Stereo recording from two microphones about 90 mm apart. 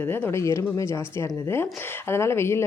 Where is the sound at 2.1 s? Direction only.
30° left (ahead or behind).